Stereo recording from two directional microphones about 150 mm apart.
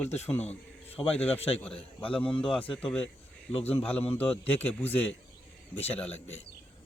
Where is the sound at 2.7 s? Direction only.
10° left (ahead or behind).